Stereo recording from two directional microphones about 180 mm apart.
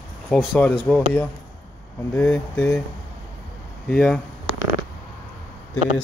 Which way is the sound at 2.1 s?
10° left (ahead or behind).